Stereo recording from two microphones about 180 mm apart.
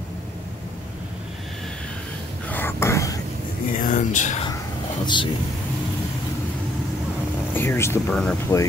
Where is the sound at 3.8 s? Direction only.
45° left (ahead or behind).